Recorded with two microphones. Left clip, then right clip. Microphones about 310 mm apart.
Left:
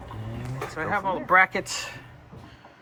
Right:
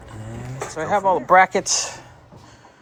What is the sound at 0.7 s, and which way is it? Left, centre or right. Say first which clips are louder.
Speech: right 8 dB; centre.